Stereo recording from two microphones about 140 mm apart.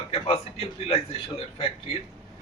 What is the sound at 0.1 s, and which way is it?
A man's voice, 45° left (ahead or behind).